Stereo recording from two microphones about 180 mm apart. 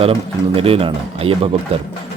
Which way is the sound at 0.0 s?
30° right (ahead or behind).